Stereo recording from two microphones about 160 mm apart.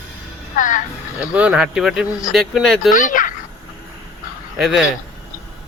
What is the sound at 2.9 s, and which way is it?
Speech, 55° left (ahead or behind).